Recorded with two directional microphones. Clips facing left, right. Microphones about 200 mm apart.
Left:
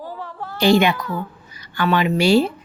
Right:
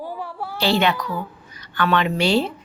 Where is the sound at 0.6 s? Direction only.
15° left (ahead or behind).